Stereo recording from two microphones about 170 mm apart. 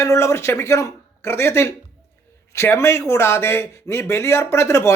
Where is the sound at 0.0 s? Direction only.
15° left (ahead or behind).